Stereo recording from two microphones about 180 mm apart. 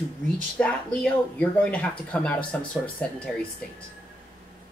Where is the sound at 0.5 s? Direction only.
5° left (ahead or behind).